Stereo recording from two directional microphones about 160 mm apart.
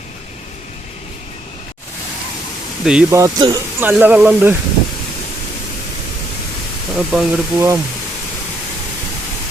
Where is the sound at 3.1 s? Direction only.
25° right (ahead or behind).